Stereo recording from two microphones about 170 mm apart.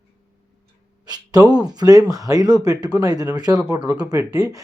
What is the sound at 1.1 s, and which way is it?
Speech, 25° right (ahead or behind).